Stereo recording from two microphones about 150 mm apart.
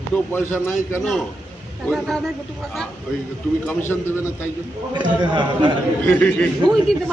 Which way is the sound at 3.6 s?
15° left (ahead or behind).